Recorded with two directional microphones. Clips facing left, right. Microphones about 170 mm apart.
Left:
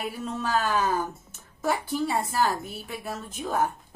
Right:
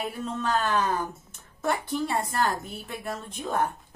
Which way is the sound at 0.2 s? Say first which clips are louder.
Even; 5° left (ahead or behind).